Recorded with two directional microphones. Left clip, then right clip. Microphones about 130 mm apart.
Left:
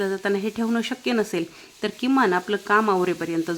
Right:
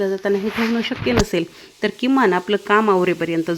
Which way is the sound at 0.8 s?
15° right (ahead or behind).